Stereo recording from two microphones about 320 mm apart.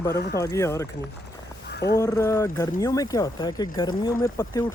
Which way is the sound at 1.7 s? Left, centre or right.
Left.